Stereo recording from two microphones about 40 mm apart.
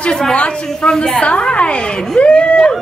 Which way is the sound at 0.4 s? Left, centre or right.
Left.